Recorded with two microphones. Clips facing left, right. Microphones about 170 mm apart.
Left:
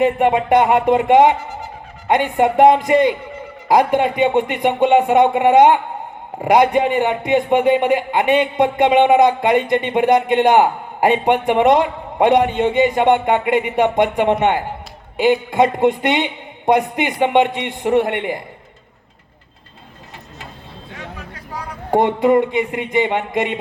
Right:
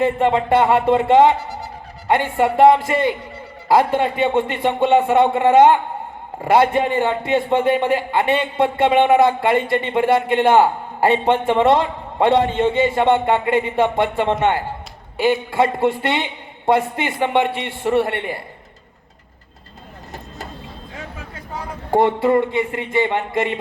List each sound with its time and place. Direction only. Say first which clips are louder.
0.0 s a man's voice: left 2 dB; 15° left (ahead or behind)
21.9 s a man's voice: left 2 dB; 20° left (ahead or behind)